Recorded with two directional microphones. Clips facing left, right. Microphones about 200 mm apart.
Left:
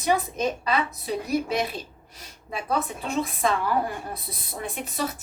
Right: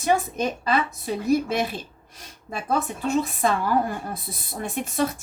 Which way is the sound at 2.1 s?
50° right (ahead or behind).